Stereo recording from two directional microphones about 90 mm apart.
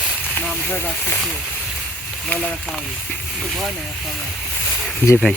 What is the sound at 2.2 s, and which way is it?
Speech, 10° left (ahead or behind).